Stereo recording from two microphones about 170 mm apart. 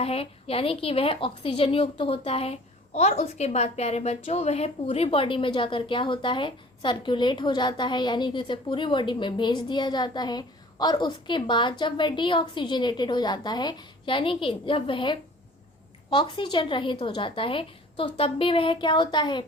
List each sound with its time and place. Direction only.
0.0 s a woman's voice: 35° left (ahead or behind)